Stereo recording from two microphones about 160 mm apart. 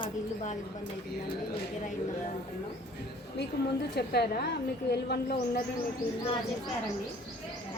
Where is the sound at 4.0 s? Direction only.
90° left.